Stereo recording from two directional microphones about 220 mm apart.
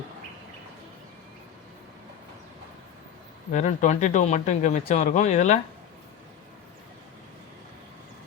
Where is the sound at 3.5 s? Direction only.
35° left (ahead or behind).